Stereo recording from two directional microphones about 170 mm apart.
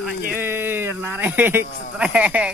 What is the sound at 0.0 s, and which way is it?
Speech, 10° right (ahead or behind).